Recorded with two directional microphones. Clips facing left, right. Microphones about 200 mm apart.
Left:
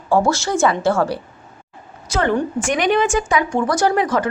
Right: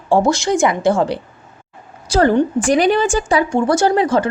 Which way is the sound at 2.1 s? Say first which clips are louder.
Right 5 dB; 35° right (ahead or behind).